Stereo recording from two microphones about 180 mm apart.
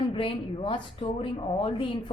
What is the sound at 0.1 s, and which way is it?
A woman's voice, 30° left (ahead or behind).